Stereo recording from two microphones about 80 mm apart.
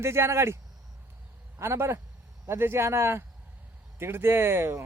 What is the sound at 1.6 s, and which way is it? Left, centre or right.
A man's voice, right.